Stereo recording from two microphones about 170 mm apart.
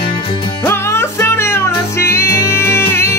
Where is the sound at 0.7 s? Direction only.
15° left (ahead or behind).